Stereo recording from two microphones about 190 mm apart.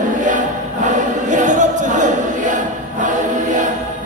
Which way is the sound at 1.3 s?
40° right (ahead or behind).